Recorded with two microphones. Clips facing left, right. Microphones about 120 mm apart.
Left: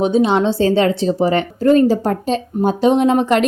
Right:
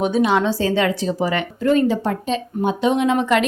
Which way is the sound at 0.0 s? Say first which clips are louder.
Left 3 dB; 25° left (ahead or behind).